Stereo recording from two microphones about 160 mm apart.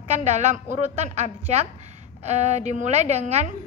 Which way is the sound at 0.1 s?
45° right (ahead or behind).